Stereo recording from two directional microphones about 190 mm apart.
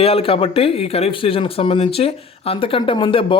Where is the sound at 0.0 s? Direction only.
30° left (ahead or behind).